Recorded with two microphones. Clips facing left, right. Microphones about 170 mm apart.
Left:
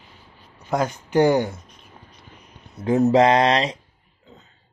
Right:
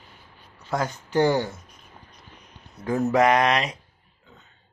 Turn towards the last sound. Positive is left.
turn(degrees=30)  # may be behind; listen again after turning